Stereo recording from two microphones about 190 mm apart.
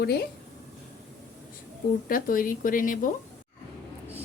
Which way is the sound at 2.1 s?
45° left (ahead or behind).